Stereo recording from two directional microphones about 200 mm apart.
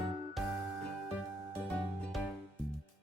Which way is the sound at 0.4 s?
Centre (ahead or behind).